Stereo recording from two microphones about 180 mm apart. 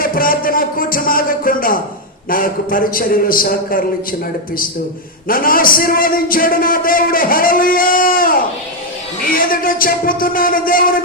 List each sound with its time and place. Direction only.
0.0 s music: 50° left (ahead or behind)
2.3 s a man's voice: 50° left (ahead or behind)
5.3 s a man's voice: 50° left (ahead or behind)